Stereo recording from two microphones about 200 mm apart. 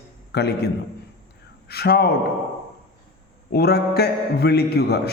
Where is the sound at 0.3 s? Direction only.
55° left (ahead or behind).